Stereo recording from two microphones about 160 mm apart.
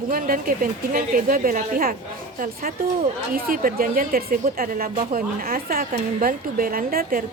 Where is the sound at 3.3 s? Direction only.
65° right (ahead or behind).